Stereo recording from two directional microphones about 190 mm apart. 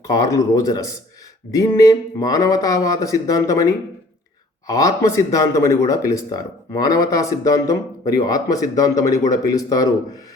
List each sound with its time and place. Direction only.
0.1 s speech: 20° left (ahead or behind)